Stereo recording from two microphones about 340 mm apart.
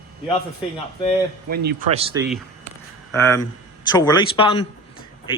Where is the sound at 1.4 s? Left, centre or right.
Right.